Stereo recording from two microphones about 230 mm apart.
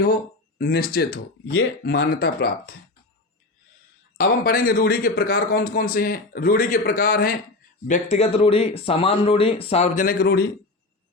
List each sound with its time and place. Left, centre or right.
0.6 s speech: left
4.2 s speech: left